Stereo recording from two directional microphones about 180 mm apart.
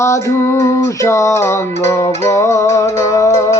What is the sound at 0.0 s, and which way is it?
Music, 15° left (ahead or behind).